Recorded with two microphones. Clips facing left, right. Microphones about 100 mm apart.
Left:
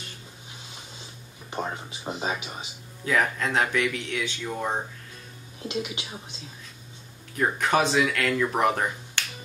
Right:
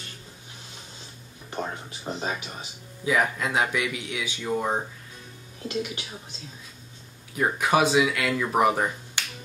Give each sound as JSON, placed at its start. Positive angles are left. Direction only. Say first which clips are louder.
{"t": 1.5, "sound": "speech", "louder": "left 1 dB", "side_deg": 15}
{"t": 3.1, "sound": "speech", "louder": "even", "side_deg": -10}
{"t": 5.7, "sound": "speech", "louder": "right 1 dB", "side_deg": 15}
{"t": 7.3, "sound": "speech", "louder": "right 1 dB", "side_deg": -10}